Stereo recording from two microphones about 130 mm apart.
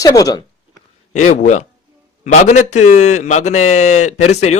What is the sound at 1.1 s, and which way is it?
A man's voice, 70° left (ahead or behind).